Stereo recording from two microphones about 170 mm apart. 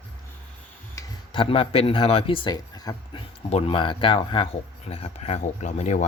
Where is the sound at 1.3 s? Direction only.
30° left (ahead or behind).